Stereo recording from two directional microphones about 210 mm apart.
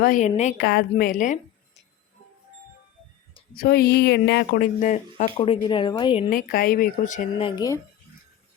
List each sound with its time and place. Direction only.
0.0 s speech: 35° left (ahead or behind)
0.6 s a woman's voice: 50° left (ahead or behind)
3.5 s speech: 45° left (ahead or behind)
5.4 s speech: 25° left (ahead or behind)
6.3 s speech: 45° left (ahead or behind); by 7.8 s 20° left (ahead or behind)